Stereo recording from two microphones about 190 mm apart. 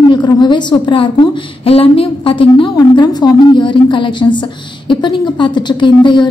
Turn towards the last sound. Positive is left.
turn(degrees=25)  # may be behind; listen again after turning